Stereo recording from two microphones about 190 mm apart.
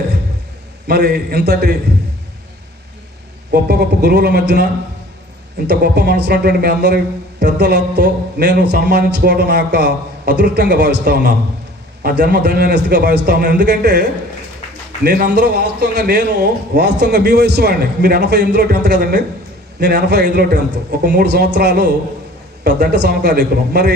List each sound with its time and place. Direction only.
0.9 s a man's voice: 55° right (ahead or behind)
3.5 s a man's voice: 60° right (ahead or behind)
5.6 s a man's voice: 60° right (ahead or behind)
15.0 s a man's voice: 55° right (ahead or behind)